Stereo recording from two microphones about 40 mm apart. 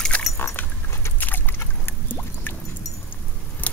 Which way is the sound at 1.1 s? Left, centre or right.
Left.